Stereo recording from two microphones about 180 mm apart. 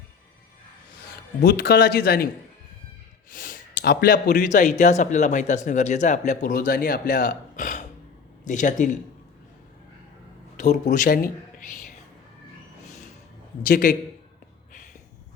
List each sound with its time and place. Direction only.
1.4 s speech: 60° left (ahead or behind)
3.2 s speech: 50° left (ahead or behind)
10.6 s speech: 45° left (ahead or behind)
13.6 s speech: 45° left (ahead or behind)